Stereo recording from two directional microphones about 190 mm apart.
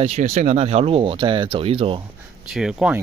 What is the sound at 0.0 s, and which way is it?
Speech, 35° right (ahead or behind).